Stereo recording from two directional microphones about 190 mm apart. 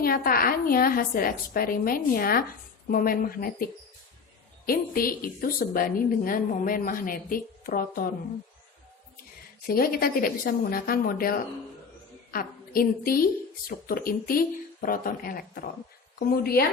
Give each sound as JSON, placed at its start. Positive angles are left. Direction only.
{"t": 0.0, "sound": "a woman's voice", "side_deg": 50}
{"t": 4.6, "sound": "a woman's voice", "side_deg": 50}
{"t": 9.6, "sound": "a woman's voice", "side_deg": 50}